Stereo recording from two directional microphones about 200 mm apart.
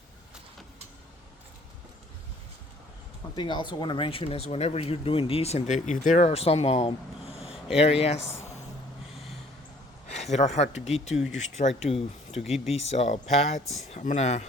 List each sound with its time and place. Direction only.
3.3 s speech: 25° left (ahead or behind)
7.3 s a sound: 5° right (ahead or behind)
7.8 s speech: 30° left (ahead or behind)
10.1 s speech: 35° left (ahead or behind)
11.1 s speech: centre (ahead or behind)
11.3 s speech: 35° left (ahead or behind)
12.3 s speech: centre (ahead or behind)
12.7 s speech: 35° left (ahead or behind)